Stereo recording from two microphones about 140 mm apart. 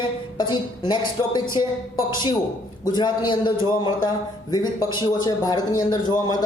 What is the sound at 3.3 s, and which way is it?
A man's voice, 35° left (ahead or behind).